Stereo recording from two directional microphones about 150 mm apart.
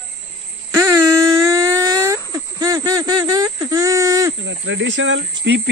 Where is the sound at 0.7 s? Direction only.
20° right (ahead or behind).